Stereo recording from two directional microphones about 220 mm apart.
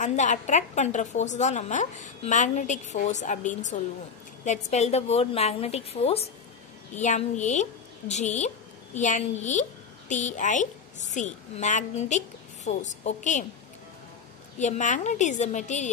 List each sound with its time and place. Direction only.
0.0 s a woman's voice: 35° left (ahead or behind)
14.6 s a woman's voice: 35° left (ahead or behind)